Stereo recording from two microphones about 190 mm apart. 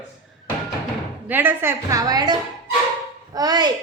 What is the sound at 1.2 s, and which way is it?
A woman's voice, 10° right (ahead or behind).